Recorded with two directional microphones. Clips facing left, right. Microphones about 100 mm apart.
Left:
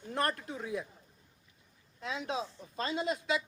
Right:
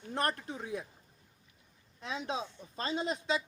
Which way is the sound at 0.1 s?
25° right (ahead or behind).